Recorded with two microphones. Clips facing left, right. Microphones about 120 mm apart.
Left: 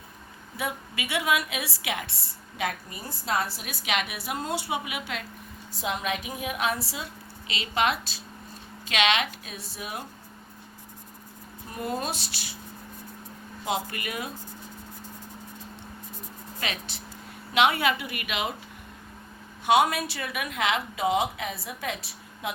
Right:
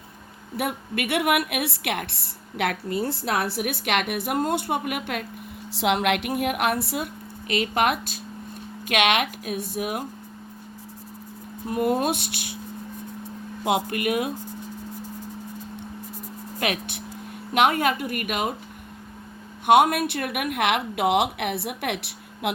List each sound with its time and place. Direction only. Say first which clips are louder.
0.5 s a woman's voice: right 6 dB; 60° right (ahead or behind)
5.7 s a woman's voice: right 8 dB; 80° right; by 10.1 s 55° right (ahead or behind)
11.7 s a woman's voice: right 8 dB; 55° right (ahead or behind)
13.7 s a woman's voice: right 7 dB; 55° right (ahead or behind)
16.6 s a woman's voice: right 7 dB; 60° right (ahead or behind)
17.5 s a woman's voice: right 2 dB; 45° right (ahead or behind)
19.6 s a woman's voice: right 5 dB; 55° right (ahead or behind)